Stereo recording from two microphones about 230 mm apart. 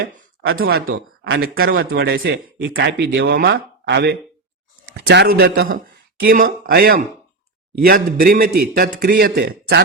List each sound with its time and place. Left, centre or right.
0.5 s a man's voice: right